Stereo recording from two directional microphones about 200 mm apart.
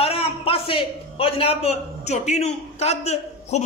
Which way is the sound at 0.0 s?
30° left (ahead or behind).